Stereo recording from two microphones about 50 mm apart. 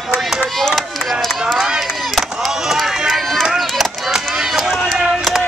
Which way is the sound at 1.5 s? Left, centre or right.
Centre.